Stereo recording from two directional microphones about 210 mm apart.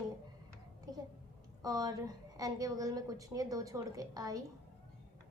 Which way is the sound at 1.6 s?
15° right (ahead or behind).